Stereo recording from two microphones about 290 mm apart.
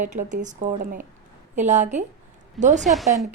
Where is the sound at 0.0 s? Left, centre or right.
Right.